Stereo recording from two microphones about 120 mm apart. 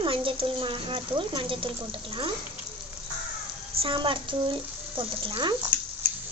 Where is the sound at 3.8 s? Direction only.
45° right (ahead or behind).